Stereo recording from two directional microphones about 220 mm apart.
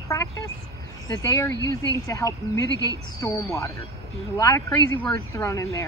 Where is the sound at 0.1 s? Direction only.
15° left (ahead or behind).